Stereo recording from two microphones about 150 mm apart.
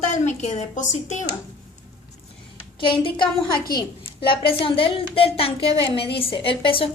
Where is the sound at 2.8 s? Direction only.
35° left (ahead or behind).